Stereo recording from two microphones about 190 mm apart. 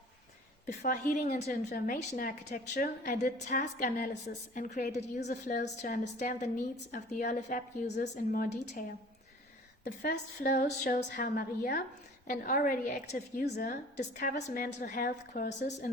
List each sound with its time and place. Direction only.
0.8 s a woman's voice: 45° left (ahead or behind)
8.6 s a woman's voice: 40° left (ahead or behind)
9.8 s a woman's voice: 55° left (ahead or behind)